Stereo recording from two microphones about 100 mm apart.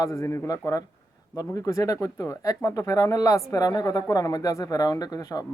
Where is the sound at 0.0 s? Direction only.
30° left (ahead or behind).